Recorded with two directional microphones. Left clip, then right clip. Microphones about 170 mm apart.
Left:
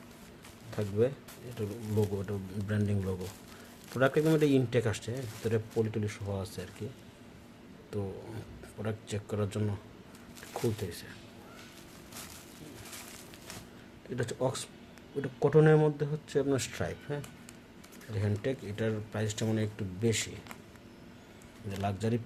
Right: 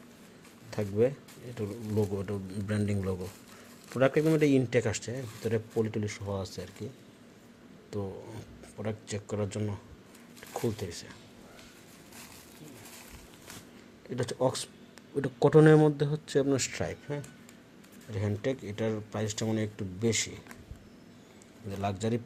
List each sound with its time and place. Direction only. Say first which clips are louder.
0.7 s speech: right 2 dB; 15° right (ahead or behind)
7.9 s speech: right 1 dB; 5° right (ahead or behind)
14.2 s speech: right 3 dB; 15° right (ahead or behind)
15.2 s speech: right 4 dB; 30° right (ahead or behind); by 20.3 s 15° right (ahead or behind)
21.8 s speech: right 2 dB; 15° right (ahead or behind)